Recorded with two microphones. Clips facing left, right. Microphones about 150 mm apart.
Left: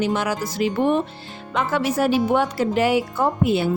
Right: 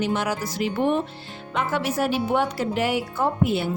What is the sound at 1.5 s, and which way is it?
Speech, 90° left.